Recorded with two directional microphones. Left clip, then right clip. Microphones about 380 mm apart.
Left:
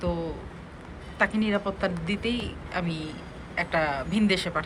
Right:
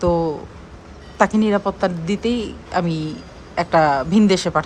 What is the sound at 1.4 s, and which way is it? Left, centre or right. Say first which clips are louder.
Speech: right 8 dB; centre.